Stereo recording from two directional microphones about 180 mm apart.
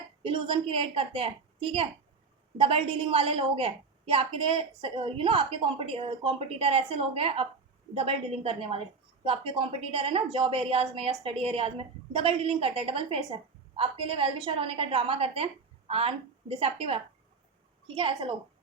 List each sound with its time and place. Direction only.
0.2 s a woman's voice: 30° right (ahead or behind)